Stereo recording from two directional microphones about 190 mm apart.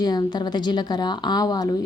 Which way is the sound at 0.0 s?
20° left (ahead or behind).